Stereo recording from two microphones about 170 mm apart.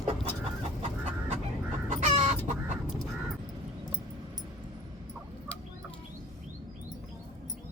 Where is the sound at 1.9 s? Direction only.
45° right (ahead or behind).